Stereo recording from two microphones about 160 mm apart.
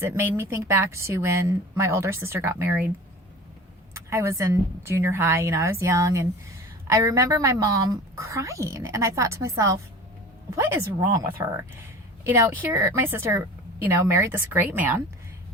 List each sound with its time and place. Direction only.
0.0 s speech: 15° right (ahead or behind)
4.1 s a woman's voice: 20° right (ahead or behind)